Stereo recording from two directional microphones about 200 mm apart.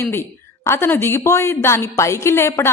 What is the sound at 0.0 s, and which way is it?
A woman's voice, 15° left (ahead or behind).